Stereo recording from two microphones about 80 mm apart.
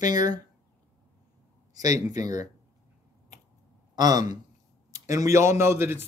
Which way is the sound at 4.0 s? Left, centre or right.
Right.